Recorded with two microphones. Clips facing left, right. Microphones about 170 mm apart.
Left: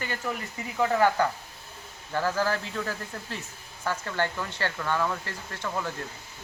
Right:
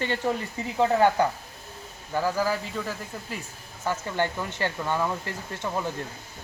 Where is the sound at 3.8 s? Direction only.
15° right (ahead or behind).